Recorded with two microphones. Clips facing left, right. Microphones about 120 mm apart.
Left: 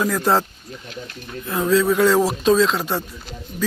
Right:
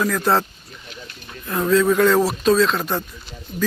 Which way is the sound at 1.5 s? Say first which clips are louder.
Right 1 dB; 10° left (ahead or behind).